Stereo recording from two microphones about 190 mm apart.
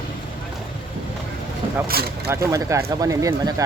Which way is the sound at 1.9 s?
55° right (ahead or behind).